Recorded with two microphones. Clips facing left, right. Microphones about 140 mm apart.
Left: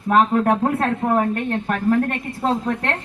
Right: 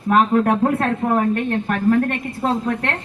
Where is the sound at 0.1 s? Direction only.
30° left (ahead or behind).